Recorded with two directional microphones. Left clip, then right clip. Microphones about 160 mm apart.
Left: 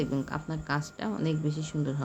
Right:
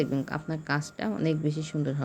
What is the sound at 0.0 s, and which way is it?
Speech, 20° right (ahead or behind).